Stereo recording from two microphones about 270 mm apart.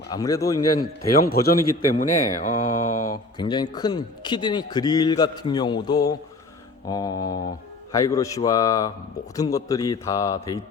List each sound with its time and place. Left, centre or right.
0.1 s a man's voice: centre
1.1 s a man's voice: left
1.9 s a sound: left
3.3 s a man's voice: centre